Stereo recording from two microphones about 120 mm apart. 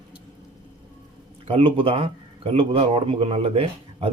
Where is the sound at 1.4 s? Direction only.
50° right (ahead or behind).